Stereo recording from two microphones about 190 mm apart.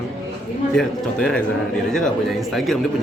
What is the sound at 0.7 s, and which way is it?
Speech, 5° left (ahead or behind).